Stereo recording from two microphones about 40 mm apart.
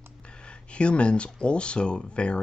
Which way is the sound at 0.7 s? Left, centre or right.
Left.